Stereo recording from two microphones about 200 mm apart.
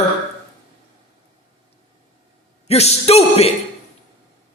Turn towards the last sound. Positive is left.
turn(degrees=30)  # may be behind; listen again after turning